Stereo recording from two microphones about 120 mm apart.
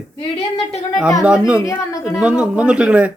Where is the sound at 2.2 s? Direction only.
10° right (ahead or behind).